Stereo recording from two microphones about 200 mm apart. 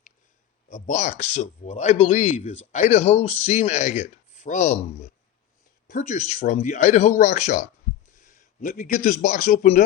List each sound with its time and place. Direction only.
0.7 s speech: 40° left (ahead or behind)